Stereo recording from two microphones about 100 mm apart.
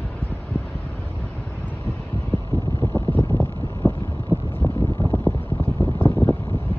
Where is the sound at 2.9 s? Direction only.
15° left (ahead or behind).